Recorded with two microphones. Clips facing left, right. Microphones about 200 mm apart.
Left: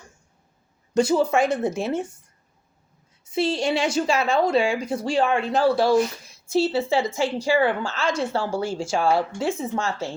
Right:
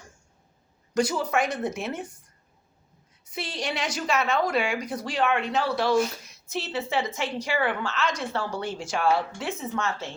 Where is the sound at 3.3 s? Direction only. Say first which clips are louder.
Left 9 dB; 25° left (ahead or behind).